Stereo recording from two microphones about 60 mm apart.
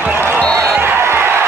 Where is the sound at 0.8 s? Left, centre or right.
Right.